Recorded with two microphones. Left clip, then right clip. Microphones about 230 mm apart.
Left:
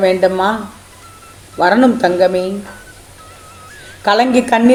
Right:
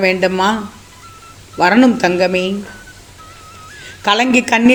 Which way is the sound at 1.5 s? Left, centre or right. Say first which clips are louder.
Even; right.